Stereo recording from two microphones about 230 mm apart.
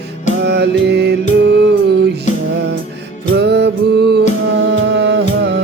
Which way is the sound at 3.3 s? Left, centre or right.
Right.